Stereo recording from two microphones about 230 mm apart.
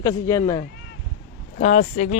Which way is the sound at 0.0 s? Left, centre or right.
Centre.